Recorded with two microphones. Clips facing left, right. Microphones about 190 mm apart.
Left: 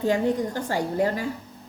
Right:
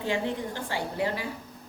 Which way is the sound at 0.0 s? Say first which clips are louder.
Left 7 dB; 45° left (ahead or behind).